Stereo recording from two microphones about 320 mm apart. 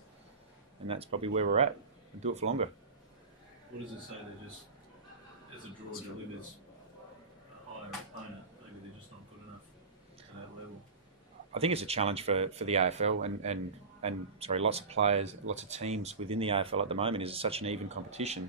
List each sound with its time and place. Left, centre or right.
0.8 s speech: centre
11.5 s speech: centre